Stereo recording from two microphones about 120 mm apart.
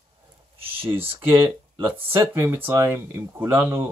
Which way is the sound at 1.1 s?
15° right (ahead or behind).